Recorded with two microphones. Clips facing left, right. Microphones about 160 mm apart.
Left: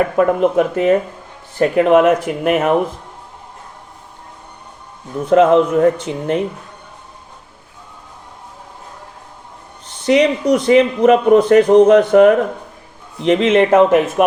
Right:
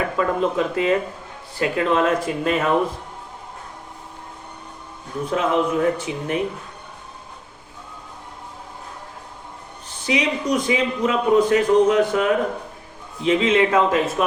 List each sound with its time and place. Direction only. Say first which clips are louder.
0.2 s speech: left 7 dB; 60° left (ahead or behind)
5.3 s a man's voice: left 10 dB; 75° left (ahead or behind)
10.1 s a man's voice: left 8 dB; 70° left (ahead or behind)